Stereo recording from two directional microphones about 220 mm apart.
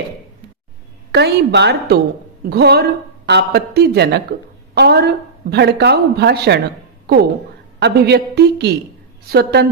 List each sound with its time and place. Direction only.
1.1 s a woman's voice: 50° right (ahead or behind)
7.8 s a woman's voice: 50° right (ahead or behind)